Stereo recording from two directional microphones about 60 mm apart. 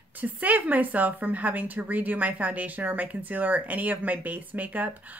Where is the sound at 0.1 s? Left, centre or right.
Right.